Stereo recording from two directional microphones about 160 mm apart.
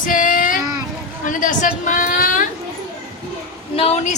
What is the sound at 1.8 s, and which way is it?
Female singing, 55° left (ahead or behind).